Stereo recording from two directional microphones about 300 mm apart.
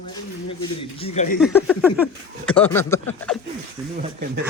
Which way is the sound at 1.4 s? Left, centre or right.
Centre.